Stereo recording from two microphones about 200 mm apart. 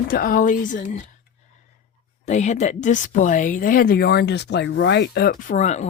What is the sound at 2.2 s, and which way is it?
Speech, 35° left (ahead or behind).